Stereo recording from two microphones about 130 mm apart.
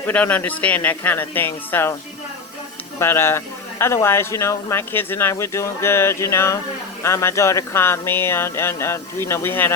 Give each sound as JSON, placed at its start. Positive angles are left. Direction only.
{"t": 0.0, "sound": "speech", "side_deg": 10}
{"t": 3.0, "sound": "speech", "side_deg": 20}